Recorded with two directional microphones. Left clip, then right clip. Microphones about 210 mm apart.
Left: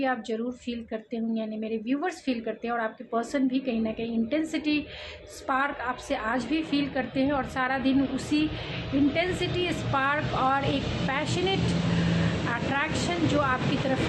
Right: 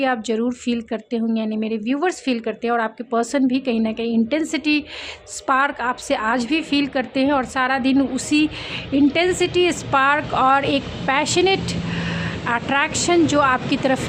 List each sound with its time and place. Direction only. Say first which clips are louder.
0.0 s speech: right 8 dB; 50° right (ahead or behind)